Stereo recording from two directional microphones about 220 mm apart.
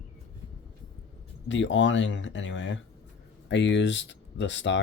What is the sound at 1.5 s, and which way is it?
Speech, 55° left (ahead or behind).